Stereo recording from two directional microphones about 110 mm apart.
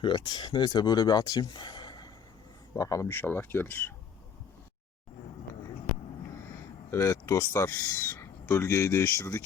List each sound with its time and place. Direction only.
0.0 s speech: 40° left (ahead or behind)
2.7 s speech: 30° left (ahead or behind)
6.9 s speech: 25° left (ahead or behind)